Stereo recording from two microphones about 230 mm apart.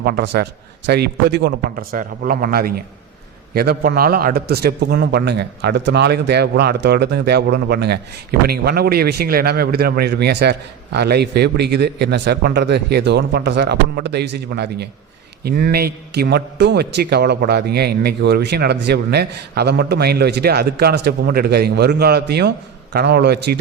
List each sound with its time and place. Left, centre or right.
0.0 s a man's voice: right